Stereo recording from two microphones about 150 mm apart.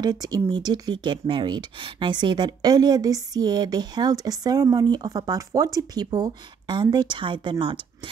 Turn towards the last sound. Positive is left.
turn(degrees=-35)  # may be behind; listen again after turning